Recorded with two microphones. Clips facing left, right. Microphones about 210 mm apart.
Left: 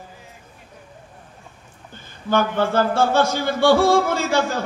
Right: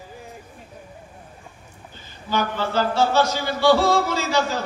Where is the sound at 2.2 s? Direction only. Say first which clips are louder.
Left 5 dB; 55° left (ahead or behind).